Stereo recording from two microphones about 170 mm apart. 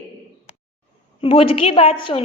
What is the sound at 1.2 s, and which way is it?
A woman's voice, 35° left (ahead or behind).